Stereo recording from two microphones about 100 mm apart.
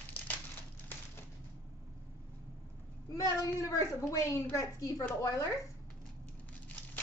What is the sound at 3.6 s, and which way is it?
A woman's voice, 30° left (ahead or behind).